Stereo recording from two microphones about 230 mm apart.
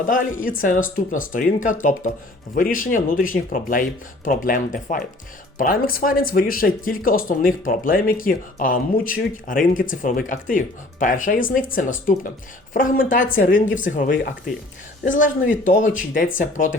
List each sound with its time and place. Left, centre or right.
0.0 s speech: left